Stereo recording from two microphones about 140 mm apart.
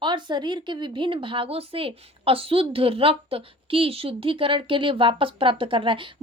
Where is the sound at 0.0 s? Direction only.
35° right (ahead or behind).